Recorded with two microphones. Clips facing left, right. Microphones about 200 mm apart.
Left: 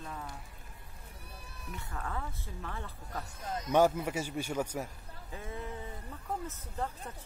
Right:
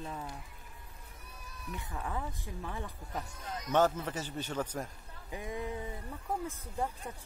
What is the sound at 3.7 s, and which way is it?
A man's voice, 10° left (ahead or behind).